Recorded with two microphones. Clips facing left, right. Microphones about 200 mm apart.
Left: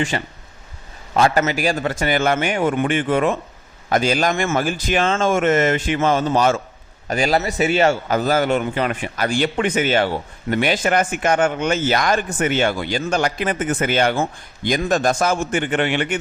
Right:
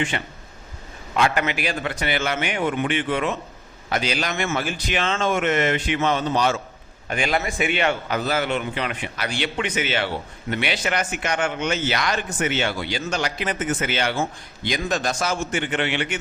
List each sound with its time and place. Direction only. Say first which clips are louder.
0.1 s a man's voice: left 4 dB; 35° left (ahead or behind)